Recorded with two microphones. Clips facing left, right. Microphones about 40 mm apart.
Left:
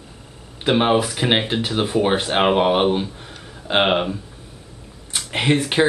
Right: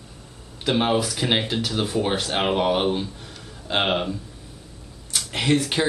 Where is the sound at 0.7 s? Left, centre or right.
Left.